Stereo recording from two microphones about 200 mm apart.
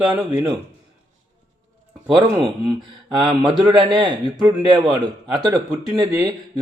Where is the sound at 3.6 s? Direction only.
25° right (ahead or behind).